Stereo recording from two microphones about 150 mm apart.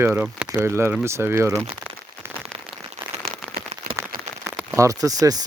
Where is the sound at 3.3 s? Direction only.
80° right.